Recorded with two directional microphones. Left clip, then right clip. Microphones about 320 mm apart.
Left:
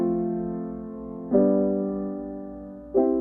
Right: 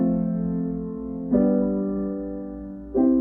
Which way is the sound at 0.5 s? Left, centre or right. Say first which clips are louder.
Right 4 dB; left.